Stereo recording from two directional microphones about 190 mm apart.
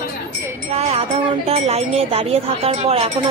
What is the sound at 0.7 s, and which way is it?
Speech, 35° right (ahead or behind).